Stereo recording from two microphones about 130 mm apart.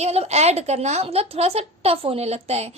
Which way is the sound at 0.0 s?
55° right (ahead or behind).